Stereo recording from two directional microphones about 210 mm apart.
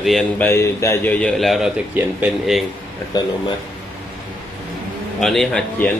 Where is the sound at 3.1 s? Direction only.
20° left (ahead or behind).